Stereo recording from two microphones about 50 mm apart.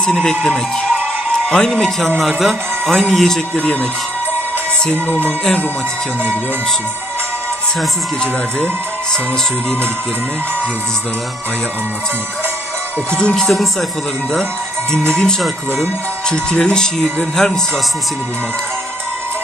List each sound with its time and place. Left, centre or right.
0.0 s speech: centre
2.2 s speech: centre
3.5 s speech: left
5.0 s music: left
13.3 s speech: centre
14.9 s speech: centre
15.4 s speech: centre
16.3 s speech: centre